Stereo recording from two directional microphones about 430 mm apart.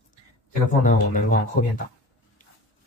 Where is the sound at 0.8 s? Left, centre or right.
Centre.